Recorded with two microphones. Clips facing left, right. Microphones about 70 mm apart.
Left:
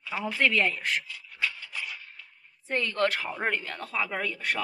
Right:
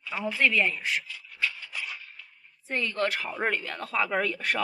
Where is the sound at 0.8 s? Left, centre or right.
Left.